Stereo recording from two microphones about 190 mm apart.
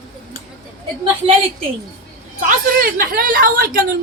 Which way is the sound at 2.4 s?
50° right (ahead or behind).